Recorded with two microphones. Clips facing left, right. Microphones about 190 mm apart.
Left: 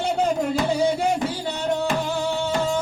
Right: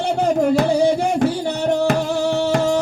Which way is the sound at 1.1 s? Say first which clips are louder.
Right 7 dB; 65° right (ahead or behind).